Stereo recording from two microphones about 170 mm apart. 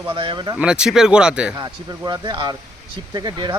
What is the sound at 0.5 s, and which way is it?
Speech, 5° right (ahead or behind).